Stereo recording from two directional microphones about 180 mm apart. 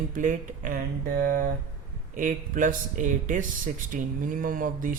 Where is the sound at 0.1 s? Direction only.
45° right (ahead or behind).